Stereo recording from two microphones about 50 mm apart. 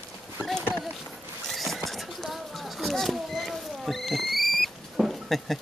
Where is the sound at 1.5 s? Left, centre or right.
Centre.